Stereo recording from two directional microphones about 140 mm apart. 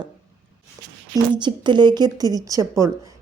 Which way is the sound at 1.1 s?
35° right (ahead or behind).